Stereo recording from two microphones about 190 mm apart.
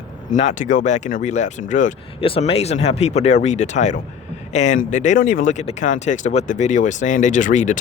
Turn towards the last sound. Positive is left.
turn(degrees=40)  # may be behind; listen again after turning